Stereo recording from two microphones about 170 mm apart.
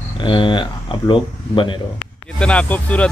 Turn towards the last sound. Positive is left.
turn(degrees=10)  # may be behind; listen again after turning